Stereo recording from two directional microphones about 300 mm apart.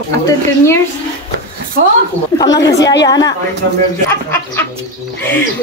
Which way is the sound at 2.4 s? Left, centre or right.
Centre.